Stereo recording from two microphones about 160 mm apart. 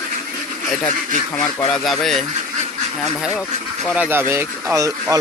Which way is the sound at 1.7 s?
5° left (ahead or behind).